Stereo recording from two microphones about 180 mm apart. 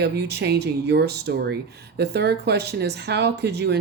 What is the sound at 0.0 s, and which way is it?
Speech, 65° right (ahead or behind).